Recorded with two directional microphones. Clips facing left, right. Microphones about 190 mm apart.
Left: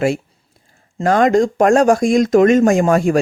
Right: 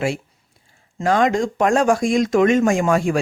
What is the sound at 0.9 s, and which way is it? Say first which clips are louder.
Speech: left 5 dB; 45° left (ahead or behind).